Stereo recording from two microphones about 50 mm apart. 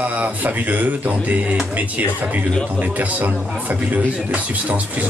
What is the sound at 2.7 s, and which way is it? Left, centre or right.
Speech, right.